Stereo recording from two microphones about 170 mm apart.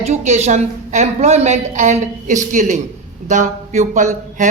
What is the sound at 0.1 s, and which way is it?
Speech, 40° right (ahead or behind).